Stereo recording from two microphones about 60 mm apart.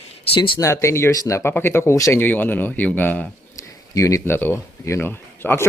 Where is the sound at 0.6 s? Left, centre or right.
Left.